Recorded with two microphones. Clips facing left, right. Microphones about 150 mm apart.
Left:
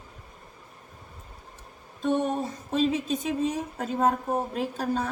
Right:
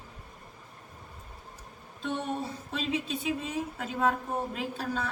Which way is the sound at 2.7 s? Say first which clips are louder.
Left 8 dB; 45° left (ahead or behind).